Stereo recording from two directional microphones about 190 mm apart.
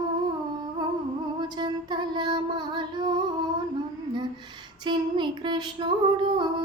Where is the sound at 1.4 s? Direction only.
25° right (ahead or behind).